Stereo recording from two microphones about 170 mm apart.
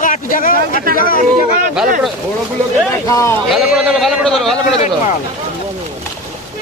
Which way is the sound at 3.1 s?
20° left (ahead or behind).